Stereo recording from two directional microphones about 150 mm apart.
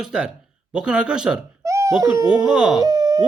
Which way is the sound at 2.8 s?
25° right (ahead or behind).